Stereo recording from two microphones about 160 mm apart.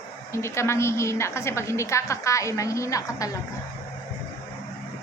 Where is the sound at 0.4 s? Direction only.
15° left (ahead or behind).